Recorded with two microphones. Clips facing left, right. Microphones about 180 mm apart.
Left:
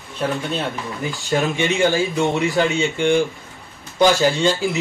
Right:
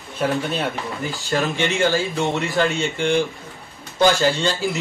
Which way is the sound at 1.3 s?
15° left (ahead or behind).